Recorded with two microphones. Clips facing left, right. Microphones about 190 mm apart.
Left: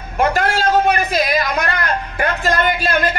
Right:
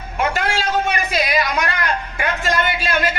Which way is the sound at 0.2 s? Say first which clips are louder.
Left 4 dB; 40° left (ahead or behind).